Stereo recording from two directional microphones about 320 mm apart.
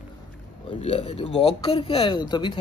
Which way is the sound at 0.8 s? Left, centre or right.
Centre.